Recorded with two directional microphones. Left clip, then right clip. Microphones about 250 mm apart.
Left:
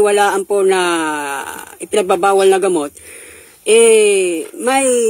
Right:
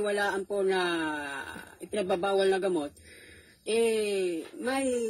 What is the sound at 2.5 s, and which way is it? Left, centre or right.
Speech, left.